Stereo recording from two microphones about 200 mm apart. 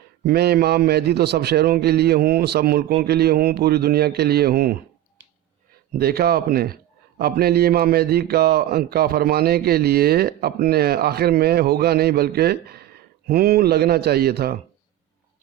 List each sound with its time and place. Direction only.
0.3 s a man's voice: 55° right (ahead or behind)
6.0 s a man's voice: 50° right (ahead or behind)